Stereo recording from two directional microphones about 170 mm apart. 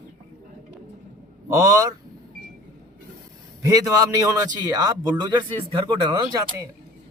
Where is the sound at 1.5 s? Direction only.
20° right (ahead or behind).